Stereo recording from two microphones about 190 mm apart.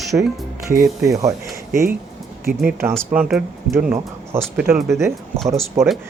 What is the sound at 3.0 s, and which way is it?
Speech, 5° right (ahead or behind).